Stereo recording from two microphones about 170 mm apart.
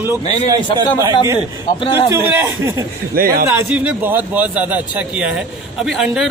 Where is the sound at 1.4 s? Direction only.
30° left (ahead or behind).